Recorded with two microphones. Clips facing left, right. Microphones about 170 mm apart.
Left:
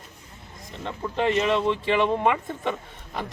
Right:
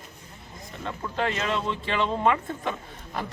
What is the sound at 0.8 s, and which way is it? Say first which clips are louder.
Speech: left 3 dB; 20° left (ahead or behind).